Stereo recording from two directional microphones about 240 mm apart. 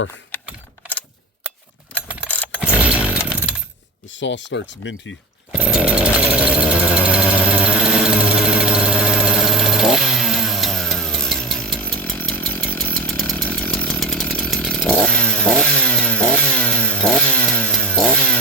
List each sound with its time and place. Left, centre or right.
2.2 s vehicle: centre
2.8 s chainsaw: centre
4.2 s speech: left
5.5 s chainsaw: centre